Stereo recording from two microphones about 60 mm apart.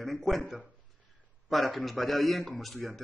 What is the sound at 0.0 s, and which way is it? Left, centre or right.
A man's voice, centre.